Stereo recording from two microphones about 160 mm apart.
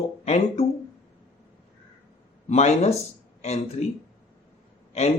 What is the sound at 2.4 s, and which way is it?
Speech, 45° left (ahead or behind).